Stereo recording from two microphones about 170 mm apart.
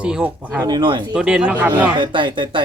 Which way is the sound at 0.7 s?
30° right (ahead or behind).